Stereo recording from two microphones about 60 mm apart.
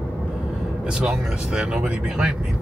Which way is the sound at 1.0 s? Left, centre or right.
Centre.